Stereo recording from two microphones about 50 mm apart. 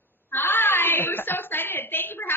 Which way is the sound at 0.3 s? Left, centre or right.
Left.